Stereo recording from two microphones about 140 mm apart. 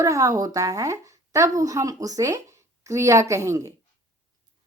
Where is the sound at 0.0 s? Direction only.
25° right (ahead or behind).